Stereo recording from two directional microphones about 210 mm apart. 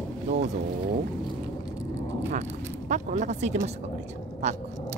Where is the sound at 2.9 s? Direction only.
35° right (ahead or behind).